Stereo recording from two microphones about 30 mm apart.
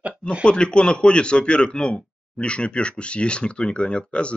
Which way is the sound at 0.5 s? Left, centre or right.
Left.